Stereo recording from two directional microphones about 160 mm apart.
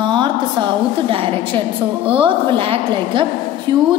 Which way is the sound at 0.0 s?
30° right (ahead or behind).